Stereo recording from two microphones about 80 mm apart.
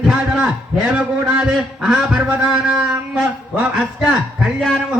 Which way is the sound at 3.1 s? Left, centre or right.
Centre.